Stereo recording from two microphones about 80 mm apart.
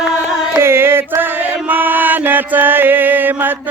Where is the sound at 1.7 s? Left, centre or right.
Right.